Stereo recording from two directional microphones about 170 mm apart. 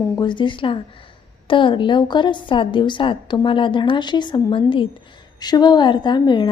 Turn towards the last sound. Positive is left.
turn(degrees=25)  # may be behind; listen again after turning